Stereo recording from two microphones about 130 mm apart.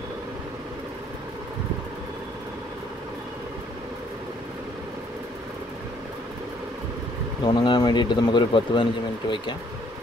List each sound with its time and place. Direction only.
7.4 s speech: 35° left (ahead or behind)